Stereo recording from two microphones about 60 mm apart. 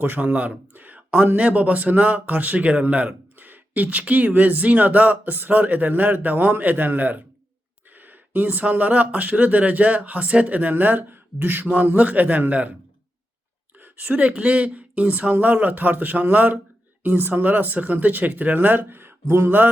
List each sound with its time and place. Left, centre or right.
0.0 s speech: right
13.7 s speech: right